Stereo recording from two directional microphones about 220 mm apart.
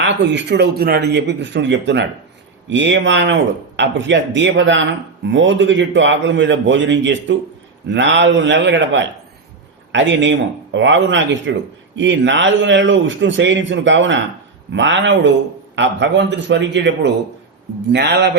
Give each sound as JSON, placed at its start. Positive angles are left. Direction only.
{"t": 0.0, "sound": "speech", "side_deg": -55}